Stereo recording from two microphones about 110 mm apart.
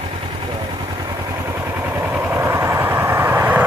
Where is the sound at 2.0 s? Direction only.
20° right (ahead or behind).